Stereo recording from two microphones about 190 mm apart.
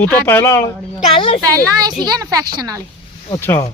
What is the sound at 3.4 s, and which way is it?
Speech, 15° left (ahead or behind).